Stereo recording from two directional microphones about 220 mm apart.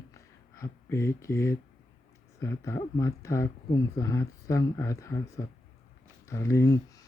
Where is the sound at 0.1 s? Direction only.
15° left (ahead or behind).